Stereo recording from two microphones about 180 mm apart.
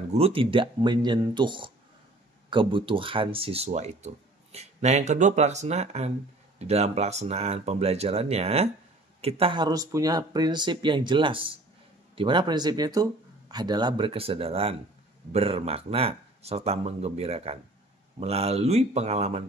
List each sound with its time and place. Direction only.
0.1 s speech: 30° right (ahead or behind)